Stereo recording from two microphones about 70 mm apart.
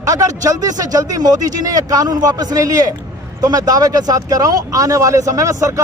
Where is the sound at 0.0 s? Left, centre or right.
Right.